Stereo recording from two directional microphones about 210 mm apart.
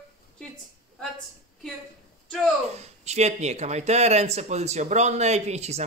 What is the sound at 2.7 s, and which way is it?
Speech, 30° right (ahead or behind).